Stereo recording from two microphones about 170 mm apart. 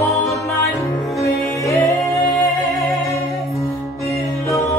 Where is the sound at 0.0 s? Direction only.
15° left (ahead or behind).